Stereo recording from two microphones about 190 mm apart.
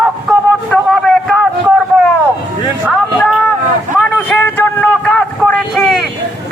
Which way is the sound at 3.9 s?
10° left (ahead or behind).